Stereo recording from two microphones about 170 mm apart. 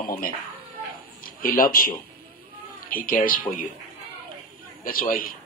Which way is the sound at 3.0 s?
55° left (ahead or behind).